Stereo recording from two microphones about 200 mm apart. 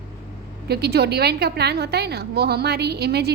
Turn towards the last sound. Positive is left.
turn(degrees=-55)  # may be behind; listen again after turning